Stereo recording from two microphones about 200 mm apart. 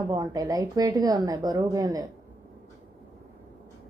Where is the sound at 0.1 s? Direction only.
20° right (ahead or behind).